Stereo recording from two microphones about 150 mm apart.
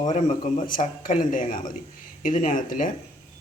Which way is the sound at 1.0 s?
60° left (ahead or behind).